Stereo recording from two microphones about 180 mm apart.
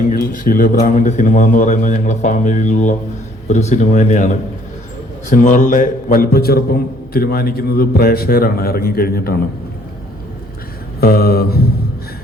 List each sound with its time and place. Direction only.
0.1 s a man's voice: 50° left (ahead or behind)
11.0 s a man's voice: 60° left (ahead or behind)